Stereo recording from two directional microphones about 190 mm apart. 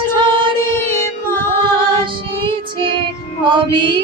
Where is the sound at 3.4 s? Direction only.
25° right (ahead or behind).